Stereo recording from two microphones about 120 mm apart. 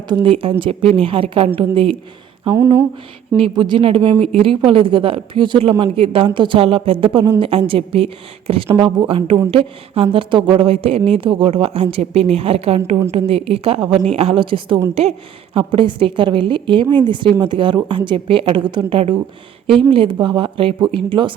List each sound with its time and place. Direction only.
0.1 s a woman's voice: 45° right (ahead or behind)
3.5 s a woman's voice: 40° right (ahead or behind)